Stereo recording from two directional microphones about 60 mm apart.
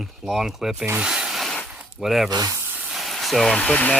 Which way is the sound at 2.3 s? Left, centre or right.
Right.